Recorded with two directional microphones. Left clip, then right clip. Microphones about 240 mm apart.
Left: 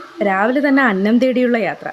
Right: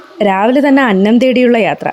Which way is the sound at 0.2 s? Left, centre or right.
Right.